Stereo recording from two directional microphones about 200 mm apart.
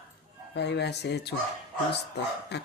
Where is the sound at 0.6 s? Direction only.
60° left (ahead or behind).